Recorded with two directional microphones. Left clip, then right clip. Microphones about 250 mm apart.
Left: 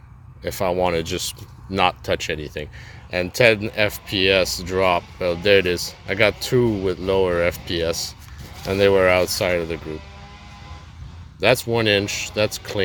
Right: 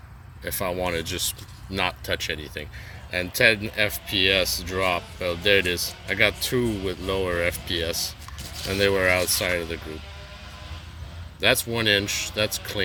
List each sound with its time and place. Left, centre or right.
0.4 s speech: left
11.3 s speech: left